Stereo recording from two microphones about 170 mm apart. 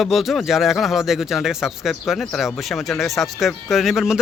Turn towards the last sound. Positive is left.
turn(degrees=0)  # may be behind; listen again after turning